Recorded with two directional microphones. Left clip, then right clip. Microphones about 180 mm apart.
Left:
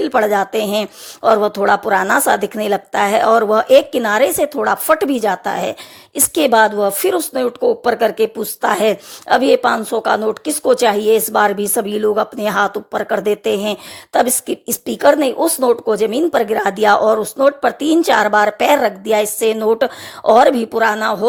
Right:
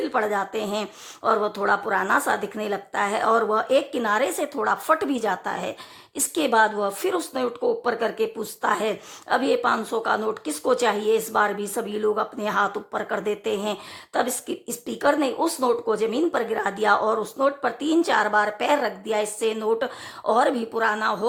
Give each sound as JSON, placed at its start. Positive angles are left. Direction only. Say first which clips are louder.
{"t": 0.0, "sound": "speech", "louder": "left 9 dB", "side_deg": 35}